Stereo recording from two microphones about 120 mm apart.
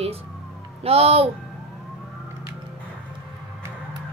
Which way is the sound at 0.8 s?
55° right (ahead or behind).